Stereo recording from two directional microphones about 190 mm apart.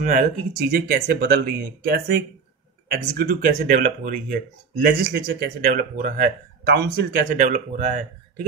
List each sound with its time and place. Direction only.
0.0 s speech: 45° right (ahead or behind)